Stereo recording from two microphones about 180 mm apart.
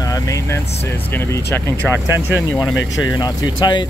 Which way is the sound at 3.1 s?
20° left (ahead or behind).